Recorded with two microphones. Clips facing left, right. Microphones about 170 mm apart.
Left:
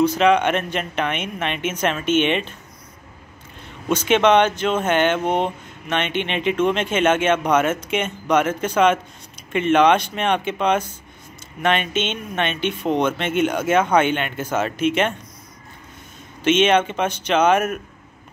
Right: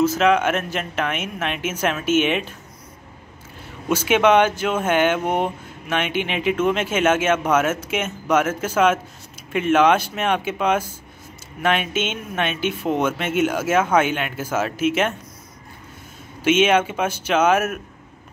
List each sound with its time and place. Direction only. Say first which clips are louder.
0.0 s speech: left 1 dB; 5° right (ahead or behind)
3.6 s speech: left 1 dB; 5° right (ahead or behind)
16.4 s speech: even; 5° right (ahead or behind)